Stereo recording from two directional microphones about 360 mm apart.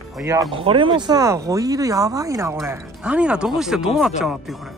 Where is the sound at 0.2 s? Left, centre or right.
Centre.